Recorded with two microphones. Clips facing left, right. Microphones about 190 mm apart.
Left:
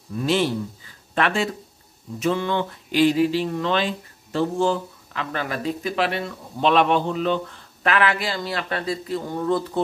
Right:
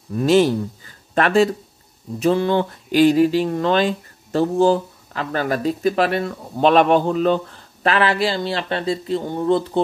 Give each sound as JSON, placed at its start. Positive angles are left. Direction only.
{"t": 0.1, "sound": "speech", "side_deg": -45}
{"t": 7.8, "sound": "speech", "side_deg": -30}